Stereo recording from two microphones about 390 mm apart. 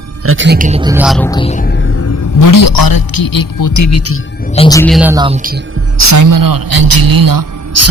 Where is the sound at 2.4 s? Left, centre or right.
Left.